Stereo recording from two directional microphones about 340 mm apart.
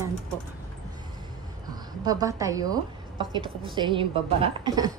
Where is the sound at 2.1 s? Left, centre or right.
Centre.